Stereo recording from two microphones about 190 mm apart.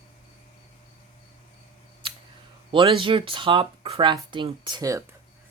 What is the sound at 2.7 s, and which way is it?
Speech, 25° right (ahead or behind).